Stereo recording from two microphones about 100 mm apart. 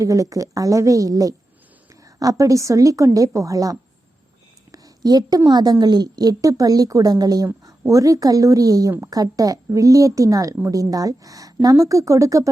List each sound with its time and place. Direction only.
0.0 s speech: 35° right (ahead or behind)
4.7 s a sound: 40° right (ahead or behind)
5.5 s a woman's voice: 45° right (ahead or behind)